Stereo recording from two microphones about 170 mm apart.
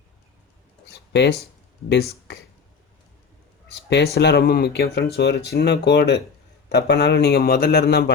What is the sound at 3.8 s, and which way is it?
A man's voice, 80° left.